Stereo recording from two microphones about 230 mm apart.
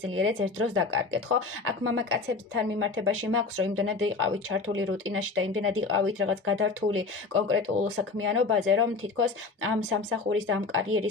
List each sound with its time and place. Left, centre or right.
0.2 s speech: right